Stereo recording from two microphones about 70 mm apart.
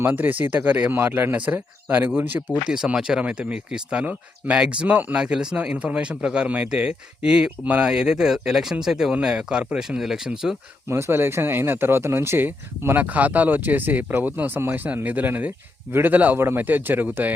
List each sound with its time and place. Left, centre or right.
0.0 s speech: right
2.6 s speech: centre
5.2 s speech: centre
10.8 s speech: right